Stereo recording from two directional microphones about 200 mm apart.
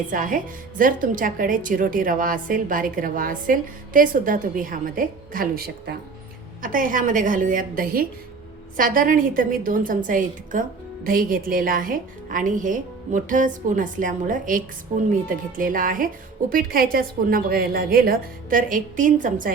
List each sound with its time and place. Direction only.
0.1 s a woman's voice: 40° right (ahead or behind)